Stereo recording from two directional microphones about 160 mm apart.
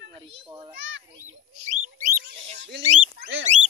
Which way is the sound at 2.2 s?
90° right.